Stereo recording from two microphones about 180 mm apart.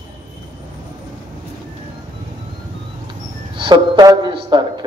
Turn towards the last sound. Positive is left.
turn(degrees=-25)  # may be behind; listen again after turning